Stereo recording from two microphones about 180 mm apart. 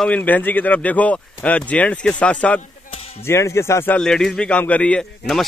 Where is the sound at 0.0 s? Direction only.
10° left (ahead or behind).